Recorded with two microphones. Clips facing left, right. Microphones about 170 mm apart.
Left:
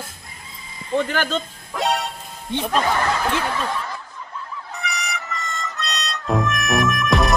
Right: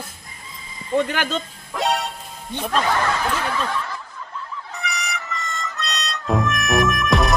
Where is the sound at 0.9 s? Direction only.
5° right (ahead or behind).